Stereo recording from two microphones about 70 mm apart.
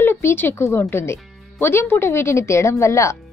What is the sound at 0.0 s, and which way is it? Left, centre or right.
Speech, left.